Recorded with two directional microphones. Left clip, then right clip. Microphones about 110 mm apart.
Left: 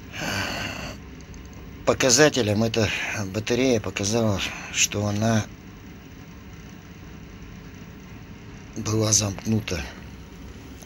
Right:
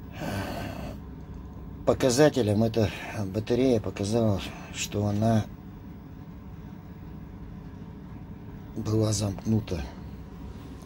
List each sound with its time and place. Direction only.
0.1 s gasp: 15° right (ahead or behind)
1.9 s speech: 20° right (ahead or behind)
8.7 s speech: 15° right (ahead or behind)